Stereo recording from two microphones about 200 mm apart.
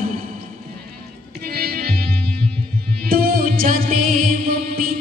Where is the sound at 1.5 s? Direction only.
50° right (ahead or behind).